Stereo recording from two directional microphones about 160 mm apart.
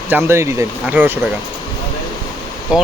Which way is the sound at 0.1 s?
15° right (ahead or behind).